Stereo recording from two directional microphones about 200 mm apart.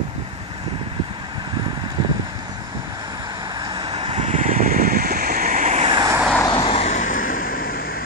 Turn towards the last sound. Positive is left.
turn(degrees=45)  # may be behind; listen again after turning